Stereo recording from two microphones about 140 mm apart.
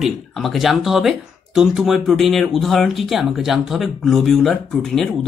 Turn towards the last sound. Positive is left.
turn(degrees=0)  # may be behind; listen again after turning